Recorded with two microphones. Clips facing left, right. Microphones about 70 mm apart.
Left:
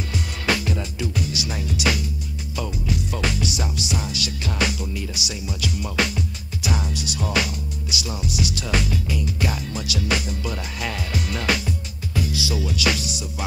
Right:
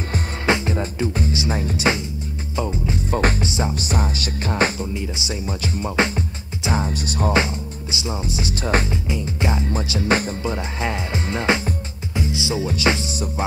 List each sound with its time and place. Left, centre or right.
0.5 s music: right